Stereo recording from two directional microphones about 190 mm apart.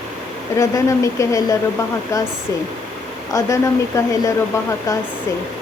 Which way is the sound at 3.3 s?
15° left (ahead or behind).